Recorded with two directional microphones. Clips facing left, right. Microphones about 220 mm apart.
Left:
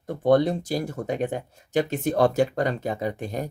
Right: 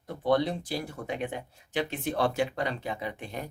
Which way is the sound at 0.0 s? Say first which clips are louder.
Left 6 dB; 45° left (ahead or behind).